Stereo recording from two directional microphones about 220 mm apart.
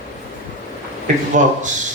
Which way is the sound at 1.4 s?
35° right (ahead or behind).